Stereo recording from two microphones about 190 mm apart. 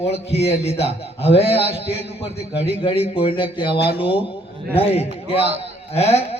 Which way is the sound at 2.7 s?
30° left (ahead or behind).